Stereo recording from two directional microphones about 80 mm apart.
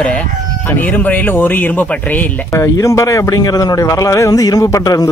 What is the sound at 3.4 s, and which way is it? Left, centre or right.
Speech, left.